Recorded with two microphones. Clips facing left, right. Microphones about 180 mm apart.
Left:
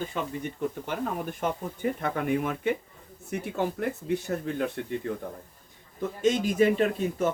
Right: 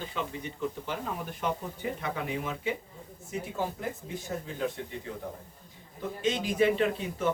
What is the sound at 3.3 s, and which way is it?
Speech, 65° left (ahead or behind).